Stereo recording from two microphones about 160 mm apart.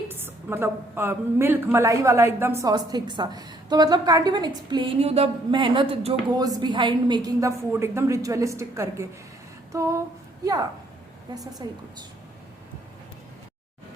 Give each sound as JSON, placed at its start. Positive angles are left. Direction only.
{"t": 0.1, "sound": "a woman's voice", "side_deg": -15}
{"t": 6.3, "sound": "a woman's voice", "side_deg": -25}